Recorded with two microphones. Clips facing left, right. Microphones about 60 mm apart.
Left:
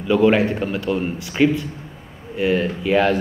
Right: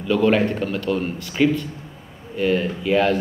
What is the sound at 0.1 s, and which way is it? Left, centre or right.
Speech, centre.